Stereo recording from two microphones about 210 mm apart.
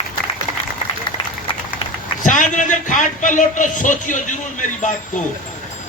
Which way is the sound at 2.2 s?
35° left (ahead or behind).